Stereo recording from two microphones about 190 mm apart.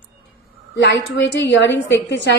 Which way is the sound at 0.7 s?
65° left (ahead or behind).